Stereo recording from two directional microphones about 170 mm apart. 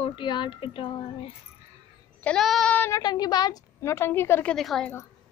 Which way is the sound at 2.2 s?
5° left (ahead or behind).